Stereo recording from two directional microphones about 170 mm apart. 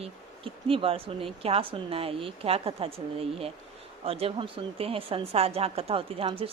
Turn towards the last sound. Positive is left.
turn(degrees=-35)  # may be behind; listen again after turning